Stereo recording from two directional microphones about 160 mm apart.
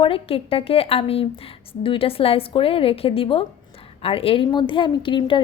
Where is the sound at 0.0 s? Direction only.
35° left (ahead or behind).